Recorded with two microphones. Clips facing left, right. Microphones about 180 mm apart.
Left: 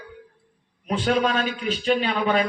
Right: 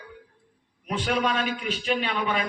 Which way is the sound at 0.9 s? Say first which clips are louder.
Left 4 dB; 35° left (ahead or behind).